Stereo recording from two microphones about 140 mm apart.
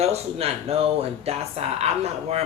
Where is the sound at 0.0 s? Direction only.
45° right (ahead or behind).